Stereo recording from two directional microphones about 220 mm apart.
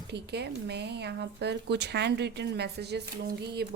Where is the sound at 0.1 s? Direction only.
50° right (ahead or behind).